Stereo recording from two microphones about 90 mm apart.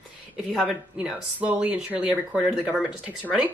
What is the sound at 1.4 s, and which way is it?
Speech, 15° right (ahead or behind).